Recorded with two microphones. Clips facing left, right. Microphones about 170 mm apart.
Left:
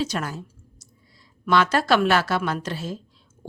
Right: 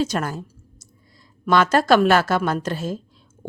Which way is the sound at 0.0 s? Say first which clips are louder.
Right 4 dB; 45° right (ahead or behind).